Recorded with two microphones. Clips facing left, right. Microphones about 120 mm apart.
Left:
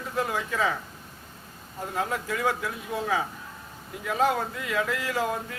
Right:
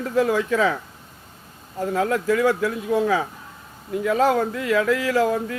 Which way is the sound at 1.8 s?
90° right.